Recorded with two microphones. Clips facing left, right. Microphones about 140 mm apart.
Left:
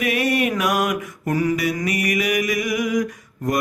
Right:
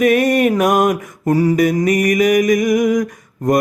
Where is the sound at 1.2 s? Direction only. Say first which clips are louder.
Right 8 dB; 35° right (ahead or behind).